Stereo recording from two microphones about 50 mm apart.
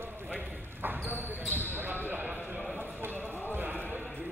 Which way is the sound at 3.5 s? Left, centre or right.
Right.